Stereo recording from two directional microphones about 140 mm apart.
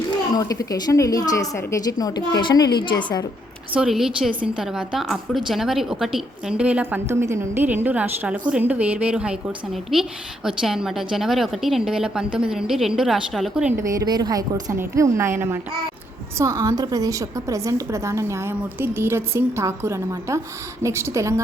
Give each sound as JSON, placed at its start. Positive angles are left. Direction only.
{"t": 0.3, "sound": "a woman's voice", "side_deg": 25}
{"t": 3.7, "sound": "a woman's voice", "side_deg": -5}
{"t": 13.7, "sound": "a woman's voice", "side_deg": -25}